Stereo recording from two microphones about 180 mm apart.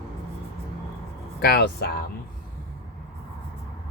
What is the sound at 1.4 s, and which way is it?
Speech, 60° left (ahead or behind).